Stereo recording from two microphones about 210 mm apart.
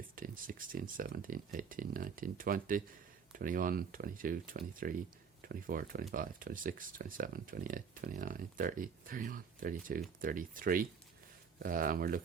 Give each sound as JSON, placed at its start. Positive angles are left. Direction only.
{"t": 0.2, "sound": "speech", "side_deg": -40}